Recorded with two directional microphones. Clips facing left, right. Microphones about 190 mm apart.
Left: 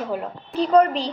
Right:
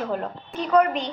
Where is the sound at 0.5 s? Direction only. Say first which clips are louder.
Left 3 dB; 30° left (ahead or behind).